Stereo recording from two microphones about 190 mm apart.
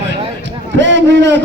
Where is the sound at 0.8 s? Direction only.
70° right (ahead or behind).